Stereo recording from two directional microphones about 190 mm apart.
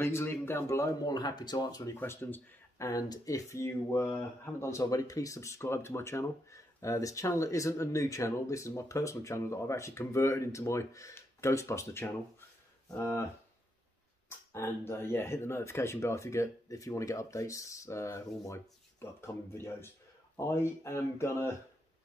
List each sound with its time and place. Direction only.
0.0 s speech: 10° left (ahead or behind)
14.5 s speech: 15° left (ahead or behind)